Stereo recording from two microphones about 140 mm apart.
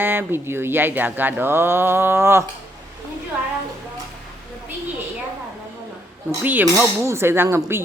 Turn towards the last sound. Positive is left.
turn(degrees=-15)  # may be behind; listen again after turning